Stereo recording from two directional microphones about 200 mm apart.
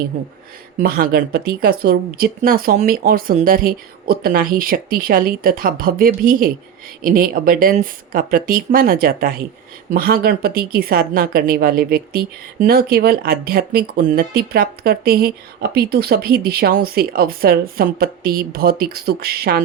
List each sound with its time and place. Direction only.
0.8 s speech: 50° right (ahead or behind)